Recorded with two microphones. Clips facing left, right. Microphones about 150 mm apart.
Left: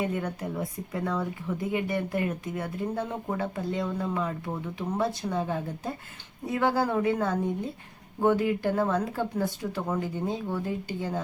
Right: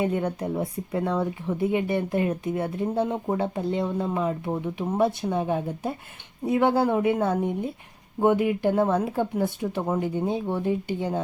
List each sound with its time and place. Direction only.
0.0 s a woman's voice: 25° right (ahead or behind)